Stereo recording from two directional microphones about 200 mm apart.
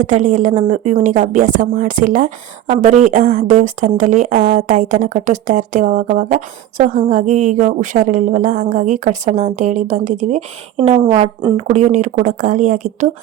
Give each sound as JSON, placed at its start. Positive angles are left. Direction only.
{"t": 0.0, "sound": "speech", "side_deg": -40}